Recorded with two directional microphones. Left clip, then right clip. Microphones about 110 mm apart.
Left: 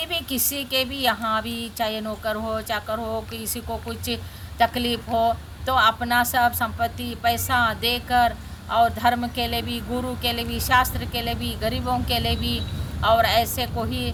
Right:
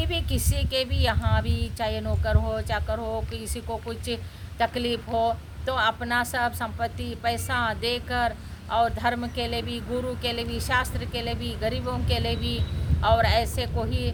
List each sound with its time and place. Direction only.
0.0 s a woman's voice: 35° right (ahead or behind)